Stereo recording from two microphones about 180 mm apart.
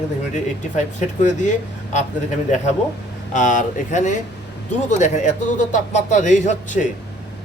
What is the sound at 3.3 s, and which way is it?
A man's voice, 45° left (ahead or behind).